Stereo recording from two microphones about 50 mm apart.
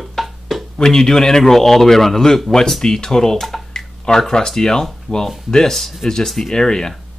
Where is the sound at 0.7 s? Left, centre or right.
Centre.